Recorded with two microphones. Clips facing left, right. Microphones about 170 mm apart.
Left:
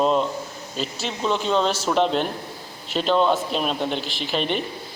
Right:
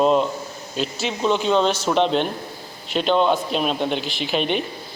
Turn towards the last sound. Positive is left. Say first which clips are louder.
# right 2 dB
turn(degrees=0)  # may be behind; listen again after turning